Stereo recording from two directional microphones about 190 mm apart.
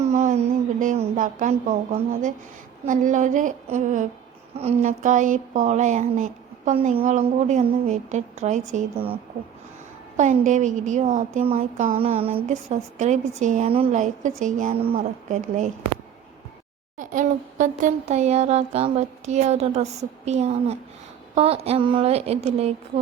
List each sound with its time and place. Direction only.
0.0 s a sound: 35° right (ahead or behind)
2.8 s speech: 45° right (ahead or behind)
10.2 s speech: 40° right (ahead or behind)
17.0 s speech: 40° right (ahead or behind)